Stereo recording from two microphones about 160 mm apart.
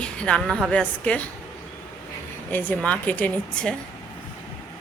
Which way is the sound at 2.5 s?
10° left (ahead or behind).